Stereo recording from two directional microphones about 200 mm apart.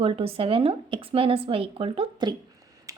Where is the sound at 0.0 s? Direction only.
30° right (ahead or behind).